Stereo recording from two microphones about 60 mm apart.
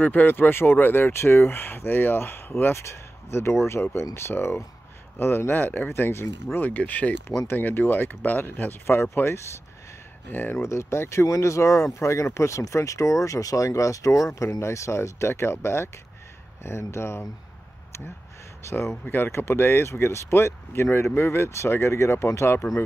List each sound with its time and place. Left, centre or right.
0.0 s speech: left
9.1 s speech: left
10.6 s speech: left
18.8 s speech: left